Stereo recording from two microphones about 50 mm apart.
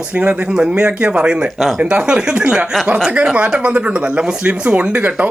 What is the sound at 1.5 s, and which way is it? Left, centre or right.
Speech, centre.